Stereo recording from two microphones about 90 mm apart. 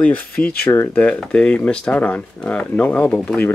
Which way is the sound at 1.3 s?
10° left (ahead or behind).